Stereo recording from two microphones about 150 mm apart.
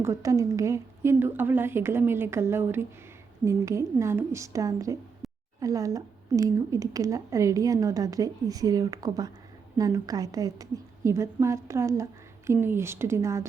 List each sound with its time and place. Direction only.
0.0 s a woman's voice: 20° right (ahead or behind)
5.2 s a sound: centre (ahead or behind)
5.5 s a woman's voice: 20° right (ahead or behind)